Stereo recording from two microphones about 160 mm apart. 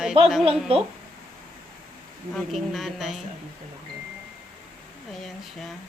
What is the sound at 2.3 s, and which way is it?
Speech, centre (ahead or behind).